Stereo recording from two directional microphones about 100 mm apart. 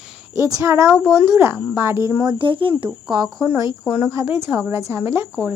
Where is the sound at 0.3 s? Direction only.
30° right (ahead or behind).